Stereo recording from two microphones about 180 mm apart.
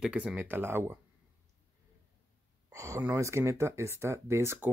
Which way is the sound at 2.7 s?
15° right (ahead or behind).